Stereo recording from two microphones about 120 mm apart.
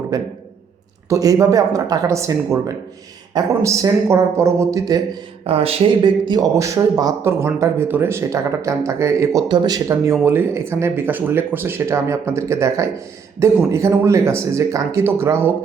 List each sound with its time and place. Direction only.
0.1 s speech: 30° right (ahead or behind)
5.5 s speech: 55° right (ahead or behind); by 9.4 s 25° right (ahead or behind)
9.5 s speech: 35° right (ahead or behind); by 15.5 s 20° right (ahead or behind)